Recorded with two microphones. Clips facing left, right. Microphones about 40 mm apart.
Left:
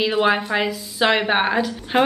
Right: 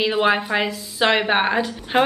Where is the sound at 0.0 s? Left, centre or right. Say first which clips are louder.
Even; centre.